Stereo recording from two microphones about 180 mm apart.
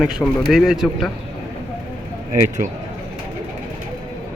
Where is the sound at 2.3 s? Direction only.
45° right (ahead or behind).